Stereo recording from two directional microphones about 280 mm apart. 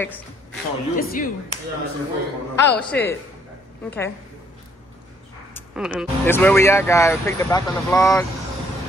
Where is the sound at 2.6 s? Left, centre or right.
Centre.